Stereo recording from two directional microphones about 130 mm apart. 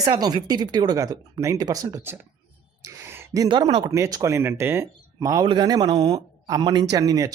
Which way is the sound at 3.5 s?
40° right (ahead or behind).